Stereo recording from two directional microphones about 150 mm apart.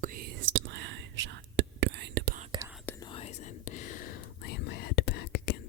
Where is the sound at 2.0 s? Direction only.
90° right.